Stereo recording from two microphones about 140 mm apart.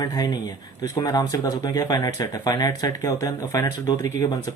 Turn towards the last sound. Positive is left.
turn(degrees=25)  # may be behind; listen again after turning